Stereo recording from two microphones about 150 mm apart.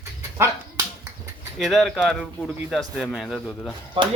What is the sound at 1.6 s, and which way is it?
Speech, centre (ahead or behind).